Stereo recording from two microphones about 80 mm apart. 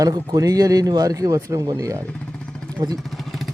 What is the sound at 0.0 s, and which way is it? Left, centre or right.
A man's voice, right.